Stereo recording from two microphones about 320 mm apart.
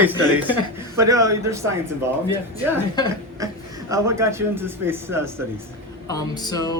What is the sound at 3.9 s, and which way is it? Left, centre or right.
A man's voice, centre.